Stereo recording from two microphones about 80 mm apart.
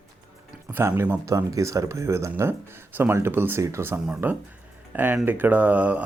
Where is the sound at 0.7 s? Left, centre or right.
Right.